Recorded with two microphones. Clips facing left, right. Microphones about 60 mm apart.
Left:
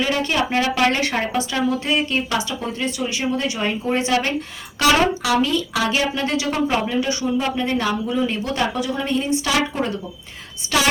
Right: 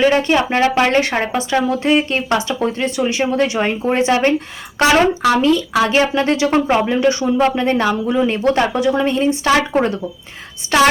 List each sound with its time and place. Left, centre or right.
0.0 s speech: right